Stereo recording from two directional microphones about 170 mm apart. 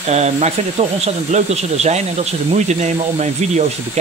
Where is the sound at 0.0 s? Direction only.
40° right (ahead or behind).